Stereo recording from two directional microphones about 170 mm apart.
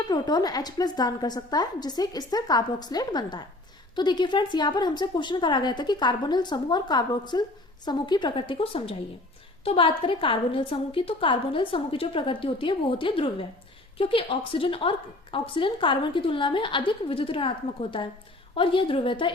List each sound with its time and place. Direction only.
0.1 s a woman's voice: 25° left (ahead or behind)